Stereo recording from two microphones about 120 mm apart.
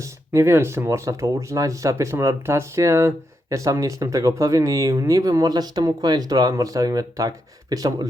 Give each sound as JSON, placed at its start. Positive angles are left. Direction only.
{"t": 0.0, "sound": "speech", "side_deg": -20}